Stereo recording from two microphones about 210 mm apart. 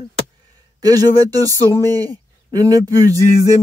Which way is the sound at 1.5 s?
10° left (ahead or behind).